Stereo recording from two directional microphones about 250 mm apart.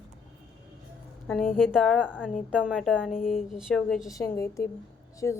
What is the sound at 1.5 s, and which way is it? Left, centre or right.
Speech, centre.